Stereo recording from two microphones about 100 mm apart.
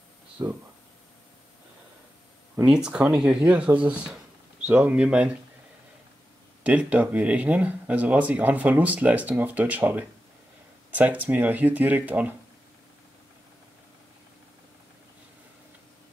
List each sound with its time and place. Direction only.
0.4 s speech: 30° right (ahead or behind)
2.6 s speech: 10° right (ahead or behind)
6.6 s speech: 15° right (ahead or behind)